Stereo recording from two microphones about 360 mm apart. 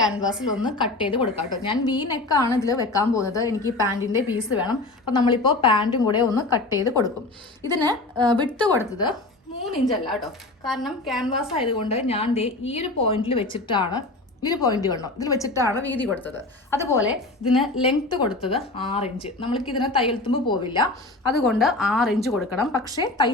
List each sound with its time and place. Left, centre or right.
0.0 s a woman's voice: centre
0.6 s a woman's voice: centre
3.8 s a woman's voice: centre
4.6 s a woman's voice: centre
7.6 s a woman's voice: centre
8.4 s a woman's voice: centre
11.5 s a woman's voice: centre
18.9 s a woman's voice: centre
21.4 s a woman's voice: centre